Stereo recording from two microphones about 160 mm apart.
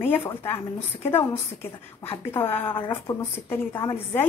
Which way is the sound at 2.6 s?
30° left (ahead or behind).